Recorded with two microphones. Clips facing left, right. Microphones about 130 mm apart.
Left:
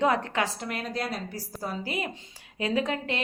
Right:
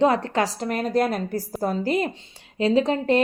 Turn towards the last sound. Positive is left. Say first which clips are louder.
# right 9 dB
turn(degrees=-35)  # may be behind; listen again after turning